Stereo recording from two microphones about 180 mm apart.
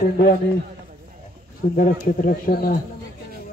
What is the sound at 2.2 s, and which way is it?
Speech, 55° left (ahead or behind).